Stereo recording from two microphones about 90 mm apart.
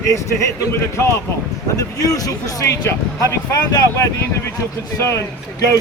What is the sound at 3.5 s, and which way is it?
Speech, 45° left (ahead or behind).